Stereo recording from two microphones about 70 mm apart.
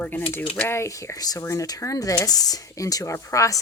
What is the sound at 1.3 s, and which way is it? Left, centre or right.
Speech, left.